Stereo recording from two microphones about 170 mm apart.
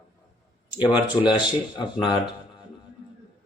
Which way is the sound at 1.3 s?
25° left (ahead or behind).